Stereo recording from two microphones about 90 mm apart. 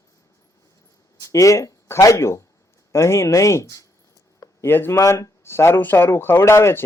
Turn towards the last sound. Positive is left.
turn(degrees=30)  # may be behind; listen again after turning